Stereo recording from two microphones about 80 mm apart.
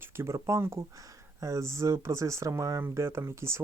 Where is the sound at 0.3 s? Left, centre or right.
Right.